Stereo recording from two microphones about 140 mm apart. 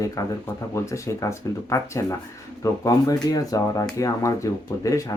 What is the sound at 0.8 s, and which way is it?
Speech, 20° left (ahead or behind).